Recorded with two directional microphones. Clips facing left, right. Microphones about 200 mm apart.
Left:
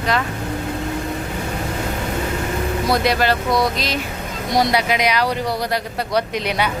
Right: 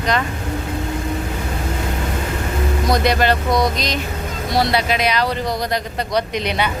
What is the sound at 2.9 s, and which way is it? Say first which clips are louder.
Speech: right 1 dB; centre (ahead or behind).